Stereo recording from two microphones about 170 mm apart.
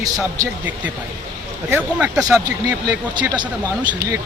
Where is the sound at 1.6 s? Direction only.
15° right (ahead or behind).